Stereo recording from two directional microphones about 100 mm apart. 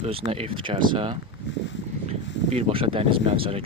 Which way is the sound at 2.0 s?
90° right.